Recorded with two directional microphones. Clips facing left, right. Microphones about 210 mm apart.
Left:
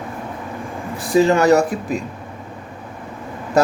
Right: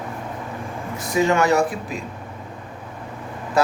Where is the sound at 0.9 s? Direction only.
35° left (ahead or behind).